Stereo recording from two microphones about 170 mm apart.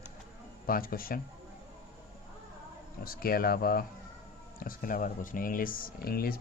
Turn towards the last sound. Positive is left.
turn(degrees=65)  # may be behind; listen again after turning